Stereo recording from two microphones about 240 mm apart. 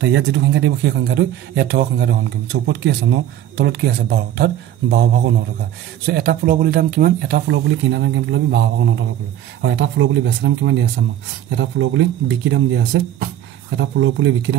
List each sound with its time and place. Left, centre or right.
0.0 s a man's voice: right